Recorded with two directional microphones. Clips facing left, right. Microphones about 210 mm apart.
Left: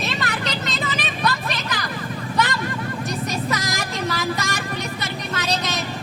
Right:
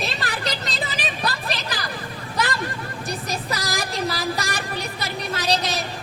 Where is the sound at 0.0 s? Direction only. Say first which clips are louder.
Left 1 dB; 35° right (ahead or behind).